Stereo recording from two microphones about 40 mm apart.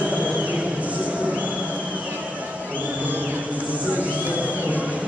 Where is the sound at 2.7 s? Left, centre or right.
Right.